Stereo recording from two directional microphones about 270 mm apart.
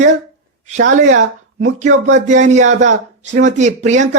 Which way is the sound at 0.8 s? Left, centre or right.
Right.